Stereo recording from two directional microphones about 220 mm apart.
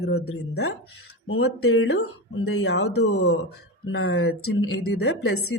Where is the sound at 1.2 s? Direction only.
65° left (ahead or behind).